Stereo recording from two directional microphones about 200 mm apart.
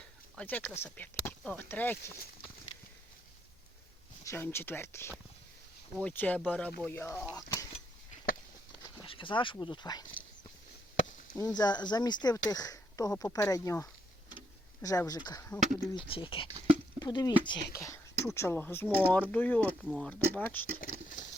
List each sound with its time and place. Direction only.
0.3 s speech: 10° left (ahead or behind)
4.2 s speech: 10° left (ahead or behind)
9.0 s speech: 25° left (ahead or behind)
11.3 s speech: 20° left (ahead or behind)
15.9 s speech: 25° left (ahead or behind); by 19.6 s 10° left (ahead or behind)
19.6 s speech: 5° right (ahead or behind)